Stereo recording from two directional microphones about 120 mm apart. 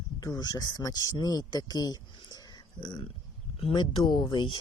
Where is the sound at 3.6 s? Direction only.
50° left (ahead or behind).